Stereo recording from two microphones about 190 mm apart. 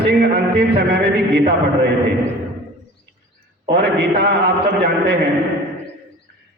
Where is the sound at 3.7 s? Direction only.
60° right (ahead or behind).